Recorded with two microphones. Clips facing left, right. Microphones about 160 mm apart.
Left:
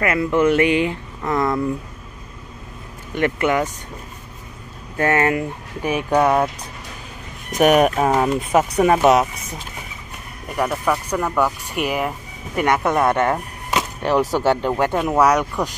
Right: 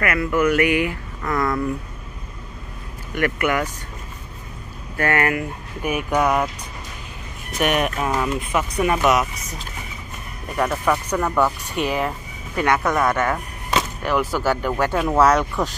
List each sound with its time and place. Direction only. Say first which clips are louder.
0.0 s speech: left 2 dB; 25° left (ahead or behind)
3.2 s speech: left 2 dB; 20° left (ahead or behind)
4.9 s speech: left 3 dB; 20° left (ahead or behind)
7.5 s speech: left 7 dB; 40° left (ahead or behind)
10.6 s speech: even; 10° left (ahead or behind)
12.6 s speech: left 2 dB; 20° left (ahead or behind)